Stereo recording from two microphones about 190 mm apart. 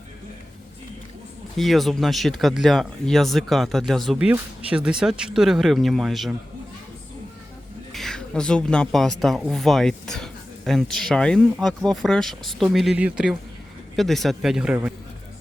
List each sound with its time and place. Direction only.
1.5 s speech: centre (ahead or behind)
7.9 s speech: centre (ahead or behind)